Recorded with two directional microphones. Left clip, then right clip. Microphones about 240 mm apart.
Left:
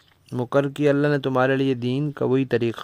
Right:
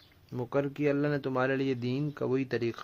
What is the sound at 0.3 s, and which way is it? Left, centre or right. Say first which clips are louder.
Speech: left 9 dB; left.